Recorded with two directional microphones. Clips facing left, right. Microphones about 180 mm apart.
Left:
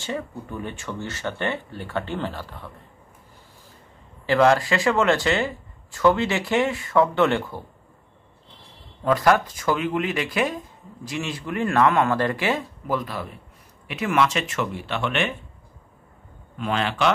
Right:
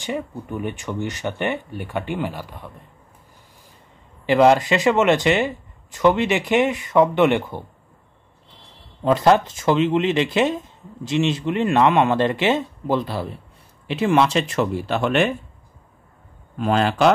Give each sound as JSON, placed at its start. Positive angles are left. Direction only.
{"t": 0.0, "sound": "speech", "side_deg": -15}
{"t": 4.3, "sound": "speech", "side_deg": -20}
{"t": 9.0, "sound": "speech", "side_deg": -25}
{"t": 16.5, "sound": "speech", "side_deg": -40}